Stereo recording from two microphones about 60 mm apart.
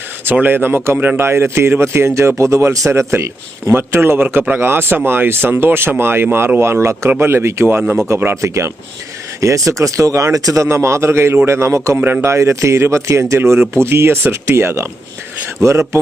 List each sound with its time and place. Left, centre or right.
0.3 s a man's voice: right
1.2 s a man's voice: right
11.9 s a man's voice: right
12.2 s speech: right